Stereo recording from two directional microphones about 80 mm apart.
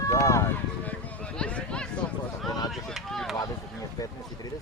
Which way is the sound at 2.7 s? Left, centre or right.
Centre.